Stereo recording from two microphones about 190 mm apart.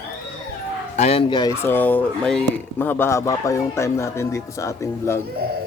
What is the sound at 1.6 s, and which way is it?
Speech, 10° left (ahead or behind).